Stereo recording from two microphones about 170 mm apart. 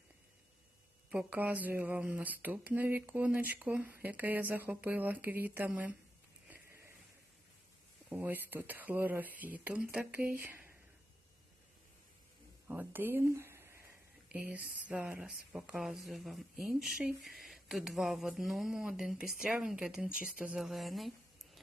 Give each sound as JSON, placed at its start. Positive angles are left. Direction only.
{"t": 1.1, "sound": "speech", "side_deg": -10}
{"t": 6.5, "sound": "a sound", "side_deg": -15}
{"t": 8.1, "sound": "speech", "side_deg": -10}
{"t": 12.6, "sound": "speech", "side_deg": -10}